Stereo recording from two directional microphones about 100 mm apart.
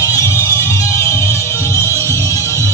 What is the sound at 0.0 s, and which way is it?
Music, 30° left (ahead or behind).